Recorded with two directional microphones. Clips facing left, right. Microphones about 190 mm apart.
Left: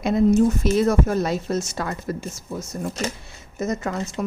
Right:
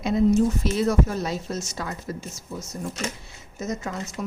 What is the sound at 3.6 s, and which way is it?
Speech, 55° left (ahead or behind).